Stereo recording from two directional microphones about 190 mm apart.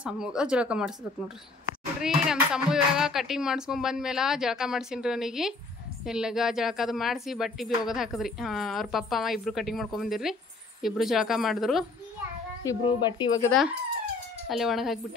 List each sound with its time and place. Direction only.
0.0 s a woman's voice: 5° right (ahead or behind)
2.0 s a woman's voice: 5° right (ahead or behind)
12.6 s speech: 20° left (ahead or behind)
13.5 s a woman's voice: centre (ahead or behind)